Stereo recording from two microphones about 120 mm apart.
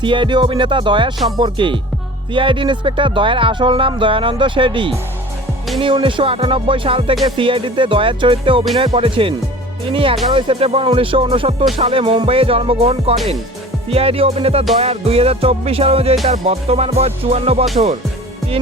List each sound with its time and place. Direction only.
0.0 s speech: 45° right (ahead or behind)
13.9 s music: 55° right (ahead or behind)